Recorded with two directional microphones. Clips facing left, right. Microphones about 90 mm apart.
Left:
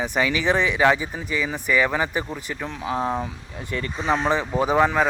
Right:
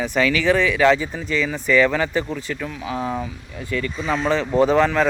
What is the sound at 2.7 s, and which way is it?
Speech, 40° left (ahead or behind).